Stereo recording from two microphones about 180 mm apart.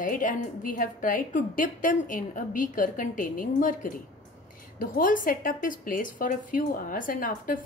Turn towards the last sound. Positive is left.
turn(degrees=50)  # may be behind; listen again after turning